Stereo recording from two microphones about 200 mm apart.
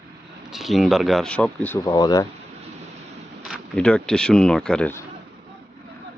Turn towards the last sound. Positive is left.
turn(degrees=5)  # may be behind; listen again after turning